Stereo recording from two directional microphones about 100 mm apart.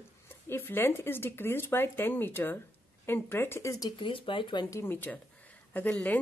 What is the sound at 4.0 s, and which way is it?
Speech, 60° left (ahead or behind).